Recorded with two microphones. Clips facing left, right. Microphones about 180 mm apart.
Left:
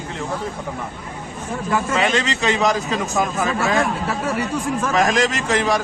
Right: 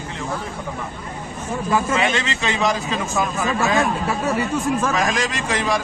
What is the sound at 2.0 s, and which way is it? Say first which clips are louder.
Speech: left 2 dB; 40° left (ahead or behind).